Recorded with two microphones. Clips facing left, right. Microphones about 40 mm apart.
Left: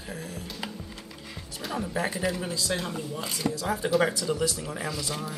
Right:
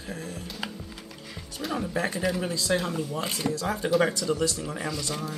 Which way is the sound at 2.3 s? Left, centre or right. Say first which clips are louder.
Right 3 dB; centre.